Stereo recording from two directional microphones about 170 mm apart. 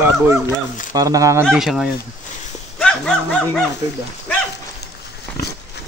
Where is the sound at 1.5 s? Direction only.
Centre (ahead or behind).